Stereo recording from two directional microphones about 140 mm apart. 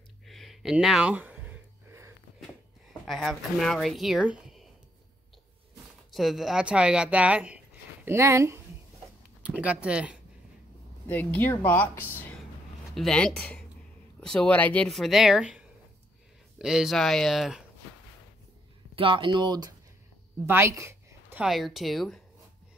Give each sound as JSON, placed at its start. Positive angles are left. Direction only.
{"t": 0.3, "sound": "a sound", "side_deg": 0}
{"t": 2.9, "sound": "speech", "side_deg": 0}
{"t": 6.1, "sound": "speech", "side_deg": 0}
{"t": 11.1, "sound": "speech", "side_deg": 15}
{"t": 18.9, "sound": "speech", "side_deg": -40}
{"t": 20.4, "sound": "a sound", "side_deg": -20}
{"t": 21.4, "sound": "speech", "side_deg": 0}